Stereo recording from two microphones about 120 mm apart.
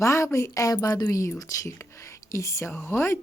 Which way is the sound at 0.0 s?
25° left (ahead or behind).